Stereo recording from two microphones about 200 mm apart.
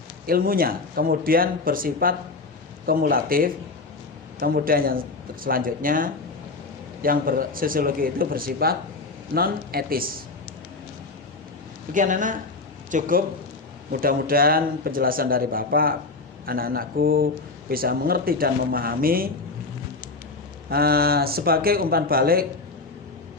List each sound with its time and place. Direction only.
0.3 s speech: 45° right (ahead or behind)
11.9 s speech: 40° right (ahead or behind)
20.7 s speech: 50° right (ahead or behind)